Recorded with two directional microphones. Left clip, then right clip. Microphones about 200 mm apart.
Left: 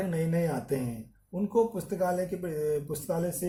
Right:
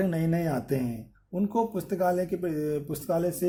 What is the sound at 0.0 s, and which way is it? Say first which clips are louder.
Speech: right 2 dB; 45° right (ahead or behind).